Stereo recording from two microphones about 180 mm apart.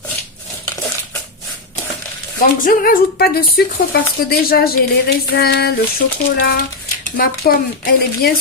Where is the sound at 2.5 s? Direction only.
50° left (ahead or behind).